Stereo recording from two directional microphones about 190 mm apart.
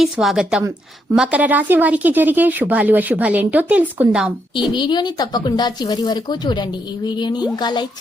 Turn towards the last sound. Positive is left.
turn(degrees=20)  # may be behind; listen again after turning